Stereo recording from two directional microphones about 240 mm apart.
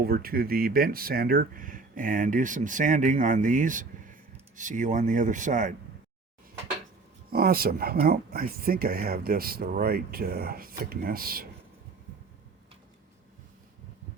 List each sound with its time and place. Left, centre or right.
0.0 s speech: right
7.3 s speech: right